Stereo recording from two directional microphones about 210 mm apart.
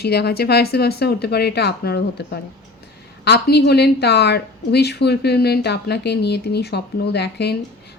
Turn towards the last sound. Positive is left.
turn(degrees=50)  # may be behind; listen again after turning